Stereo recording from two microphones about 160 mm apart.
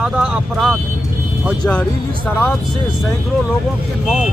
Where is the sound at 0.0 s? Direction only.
5° right (ahead or behind).